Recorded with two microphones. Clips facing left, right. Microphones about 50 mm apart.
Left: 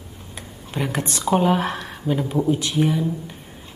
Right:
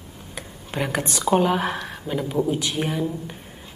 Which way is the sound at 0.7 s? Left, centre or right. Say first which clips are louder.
Even; right.